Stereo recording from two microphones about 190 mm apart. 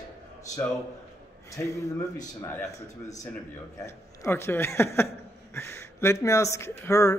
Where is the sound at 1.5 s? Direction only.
15° left (ahead or behind).